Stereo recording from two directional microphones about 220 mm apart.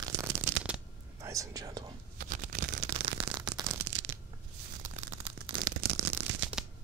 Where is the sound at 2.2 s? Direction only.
35° right (ahead or behind).